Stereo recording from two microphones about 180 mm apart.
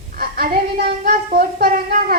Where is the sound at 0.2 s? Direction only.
55° right (ahead or behind).